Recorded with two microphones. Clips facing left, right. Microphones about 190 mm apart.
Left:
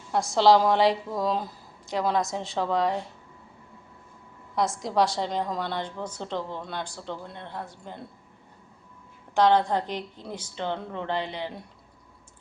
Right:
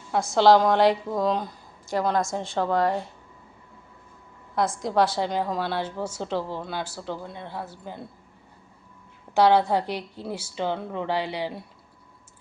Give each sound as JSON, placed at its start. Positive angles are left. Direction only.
{"t": 0.1, "sound": "a woman's voice", "side_deg": 0}
{"t": 4.5, "sound": "a woman's voice", "side_deg": 0}
{"t": 9.3, "sound": "a woman's voice", "side_deg": -10}